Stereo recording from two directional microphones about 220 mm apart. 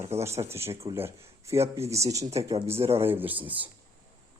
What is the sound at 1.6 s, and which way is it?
Speech, 25° right (ahead or behind).